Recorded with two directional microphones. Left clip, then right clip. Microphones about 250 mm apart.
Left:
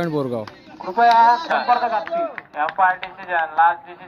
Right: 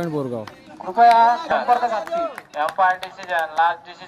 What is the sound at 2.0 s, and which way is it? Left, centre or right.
Speech, right.